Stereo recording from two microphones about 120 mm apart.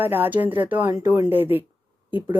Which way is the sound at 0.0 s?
15° right (ahead or behind).